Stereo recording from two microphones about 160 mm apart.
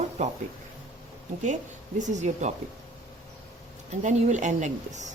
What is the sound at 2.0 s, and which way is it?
Speech, 50° right (ahead or behind).